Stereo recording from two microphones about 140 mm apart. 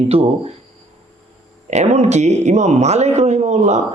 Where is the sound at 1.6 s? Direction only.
55° right (ahead or behind).